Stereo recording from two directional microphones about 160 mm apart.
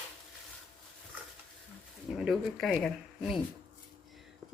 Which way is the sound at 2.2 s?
Centre (ahead or behind).